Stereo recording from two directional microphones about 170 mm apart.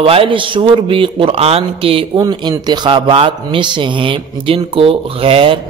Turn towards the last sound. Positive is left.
turn(degrees=-35)  # may be behind; listen again after turning